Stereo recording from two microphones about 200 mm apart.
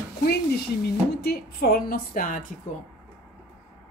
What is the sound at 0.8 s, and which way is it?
Speech, 55° left (ahead or behind).